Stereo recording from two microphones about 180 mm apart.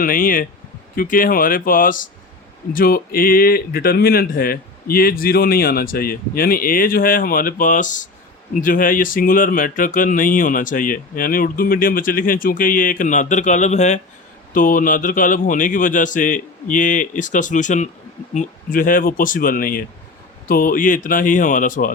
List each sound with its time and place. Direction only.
0.0 s speech: 50° left (ahead or behind)